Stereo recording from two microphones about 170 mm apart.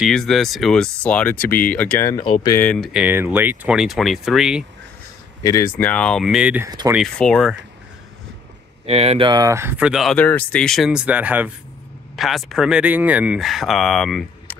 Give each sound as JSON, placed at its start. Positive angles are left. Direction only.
{"t": 0.0, "sound": "speech", "side_deg": 0}
{"t": 2.0, "sound": "speech", "side_deg": 25}
{"t": 2.6, "sound": "speech", "side_deg": 5}
{"t": 2.9, "sound": "speech", "side_deg": -10}
{"t": 5.4, "sound": "speech", "side_deg": 20}
{"t": 7.2, "sound": "speech", "side_deg": 5}
{"t": 8.8, "sound": "speech", "side_deg": -35}
{"t": 9.3, "sound": "speech", "side_deg": -20}
{"t": 10.1, "sound": "speech", "side_deg": 10}